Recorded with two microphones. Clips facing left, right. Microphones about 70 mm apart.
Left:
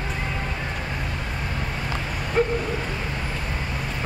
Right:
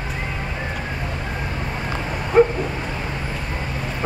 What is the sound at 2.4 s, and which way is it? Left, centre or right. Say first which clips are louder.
Bow-wow: right 8 dB; right.